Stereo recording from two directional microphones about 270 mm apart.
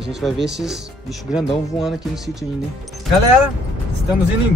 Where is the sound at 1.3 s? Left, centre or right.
Centre.